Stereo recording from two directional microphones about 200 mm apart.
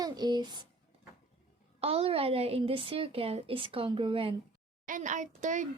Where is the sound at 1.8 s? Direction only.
30° right (ahead or behind).